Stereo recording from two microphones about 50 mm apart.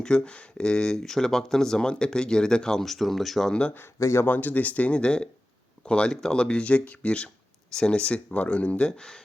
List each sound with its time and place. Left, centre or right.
0.0 s speech: centre
2.8 s speech: centre
3.5 s speech: left
4.0 s speech: left
4.3 s speech: left
8.9 s speech: centre